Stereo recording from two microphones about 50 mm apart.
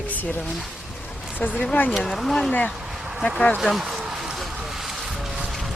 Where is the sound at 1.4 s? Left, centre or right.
Left.